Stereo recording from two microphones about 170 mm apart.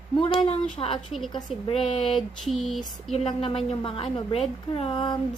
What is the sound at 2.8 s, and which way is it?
A woman's voice, 35° left (ahead or behind).